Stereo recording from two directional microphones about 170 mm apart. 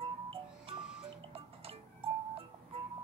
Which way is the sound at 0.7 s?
5° right (ahead or behind).